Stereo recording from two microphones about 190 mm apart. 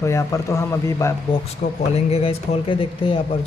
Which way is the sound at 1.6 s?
45° left (ahead or behind).